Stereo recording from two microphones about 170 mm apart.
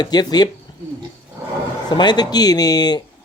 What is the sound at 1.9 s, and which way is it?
Speech, 25° left (ahead or behind).